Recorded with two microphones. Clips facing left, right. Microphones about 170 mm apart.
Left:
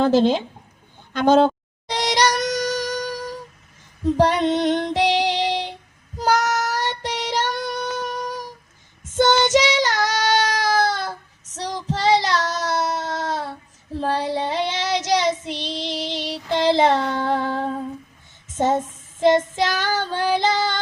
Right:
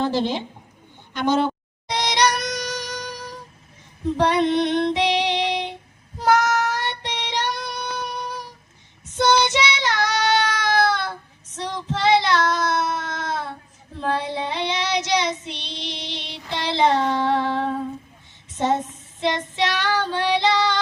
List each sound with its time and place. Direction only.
1.9 s music: 40° left (ahead or behind)
6.1 s child singing: 40° left (ahead or behind)
18.4 s a sound: 45° left (ahead or behind)
19.2 s child singing: 45° left (ahead or behind)